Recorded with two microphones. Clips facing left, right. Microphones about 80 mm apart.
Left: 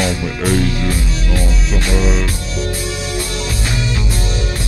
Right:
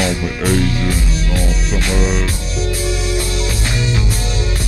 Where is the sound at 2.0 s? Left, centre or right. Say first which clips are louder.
Left 1 dB; centre.